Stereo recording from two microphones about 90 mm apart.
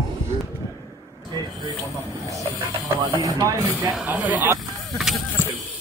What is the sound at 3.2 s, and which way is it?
Speech, 40° right (ahead or behind).